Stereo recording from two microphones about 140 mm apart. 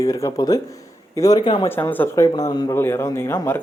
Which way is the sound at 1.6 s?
15° left (ahead or behind).